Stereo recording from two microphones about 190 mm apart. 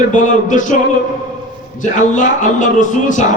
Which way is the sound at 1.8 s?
40° left (ahead or behind).